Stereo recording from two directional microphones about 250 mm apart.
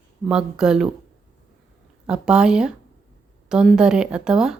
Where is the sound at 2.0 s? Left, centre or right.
Centre.